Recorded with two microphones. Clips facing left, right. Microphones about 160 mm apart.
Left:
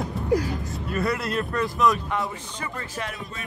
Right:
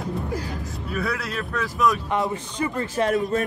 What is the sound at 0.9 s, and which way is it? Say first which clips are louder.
Speech: left 2 dB; centre (ahead or behind).